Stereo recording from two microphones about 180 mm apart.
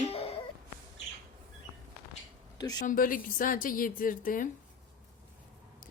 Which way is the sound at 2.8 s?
50° left (ahead or behind).